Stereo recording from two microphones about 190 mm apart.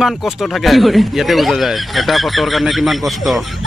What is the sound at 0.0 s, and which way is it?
Speech, centre (ahead or behind).